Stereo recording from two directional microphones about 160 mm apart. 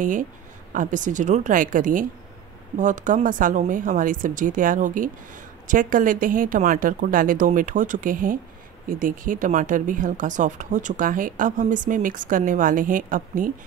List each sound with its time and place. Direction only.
0.0 s speech: 55° right (ahead or behind)